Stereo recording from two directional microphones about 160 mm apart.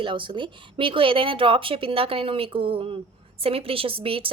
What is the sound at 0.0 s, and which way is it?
A woman's voice, 30° right (ahead or behind).